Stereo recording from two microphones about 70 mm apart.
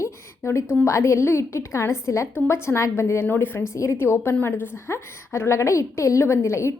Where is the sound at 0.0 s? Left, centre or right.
Left.